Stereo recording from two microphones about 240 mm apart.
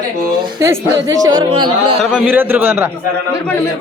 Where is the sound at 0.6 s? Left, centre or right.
Centre.